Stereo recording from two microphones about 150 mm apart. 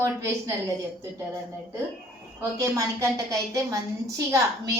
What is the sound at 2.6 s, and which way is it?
A woman's voice, 20° right (ahead or behind).